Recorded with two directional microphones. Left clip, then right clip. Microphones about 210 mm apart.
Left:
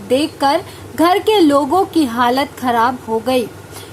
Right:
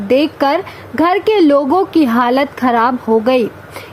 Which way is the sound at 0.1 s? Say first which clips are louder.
Right 2 dB; 25° right (ahead or behind).